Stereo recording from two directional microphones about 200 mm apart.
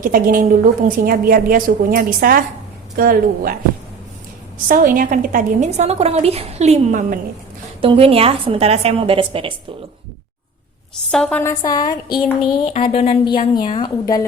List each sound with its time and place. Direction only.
0.0 s a woman's voice: 45° right (ahead or behind)
4.7 s a woman's voice: 45° right (ahead or behind); by 9.5 s 25° right (ahead or behind)
11.1 s a woman's voice: 5° left (ahead or behind)